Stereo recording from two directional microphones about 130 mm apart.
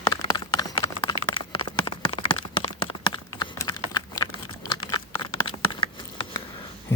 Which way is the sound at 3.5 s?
30° left (ahead or behind).